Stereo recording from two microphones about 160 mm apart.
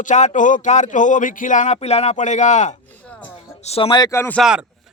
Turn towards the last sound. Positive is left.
turn(degrees=-5)  # may be behind; listen again after turning